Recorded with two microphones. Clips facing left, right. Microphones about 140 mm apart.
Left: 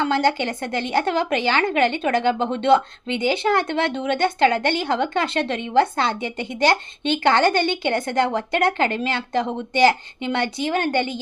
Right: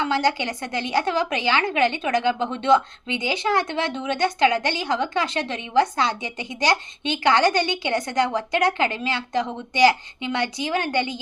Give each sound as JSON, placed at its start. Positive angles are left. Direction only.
{"t": 0.0, "sound": "a woman's voice", "side_deg": 50}